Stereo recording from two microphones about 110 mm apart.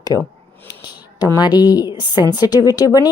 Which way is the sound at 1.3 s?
40° left (ahead or behind).